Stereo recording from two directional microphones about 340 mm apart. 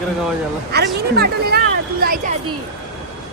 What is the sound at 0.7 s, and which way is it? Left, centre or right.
Speech, right.